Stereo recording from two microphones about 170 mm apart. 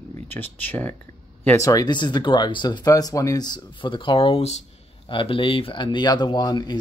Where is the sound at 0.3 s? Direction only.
10° left (ahead or behind).